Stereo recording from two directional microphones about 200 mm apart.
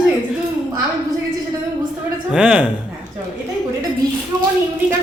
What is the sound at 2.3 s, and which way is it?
Speech, 5° right (ahead or behind).